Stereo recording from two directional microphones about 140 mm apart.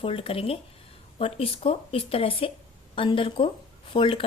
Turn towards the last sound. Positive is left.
turn(degrees=40)  # may be behind; listen again after turning